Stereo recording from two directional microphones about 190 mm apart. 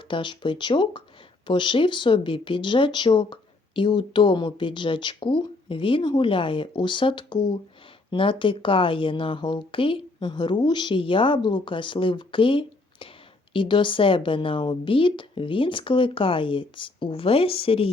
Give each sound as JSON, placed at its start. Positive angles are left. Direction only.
{"t": 0.1, "sound": "speech", "side_deg": 25}